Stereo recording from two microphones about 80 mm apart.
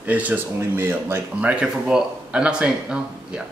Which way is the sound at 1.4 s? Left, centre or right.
Centre.